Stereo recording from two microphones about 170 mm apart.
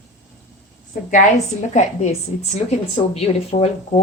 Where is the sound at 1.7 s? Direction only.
40° left (ahead or behind).